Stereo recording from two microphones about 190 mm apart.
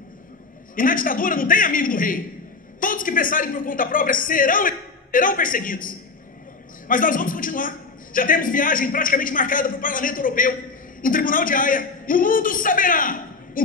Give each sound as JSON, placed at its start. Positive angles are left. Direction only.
{"t": 0.7, "sound": "a man's voice", "side_deg": 45}